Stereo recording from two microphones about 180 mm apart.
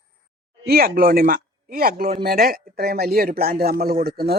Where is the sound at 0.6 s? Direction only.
55° right (ahead or behind).